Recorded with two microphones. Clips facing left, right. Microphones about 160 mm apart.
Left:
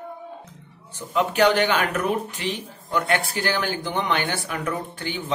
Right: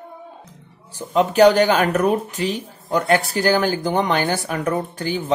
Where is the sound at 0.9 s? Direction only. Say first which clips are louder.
Right 6 dB; 40° right (ahead or behind).